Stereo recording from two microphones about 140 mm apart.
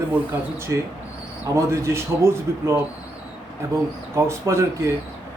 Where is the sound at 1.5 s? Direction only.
20° right (ahead or behind).